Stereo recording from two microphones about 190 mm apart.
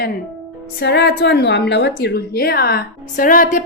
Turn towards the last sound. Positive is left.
turn(degrees=45)  # may be behind; listen again after turning